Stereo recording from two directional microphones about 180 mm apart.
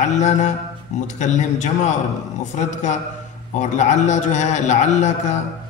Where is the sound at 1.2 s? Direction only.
40° left (ahead or behind).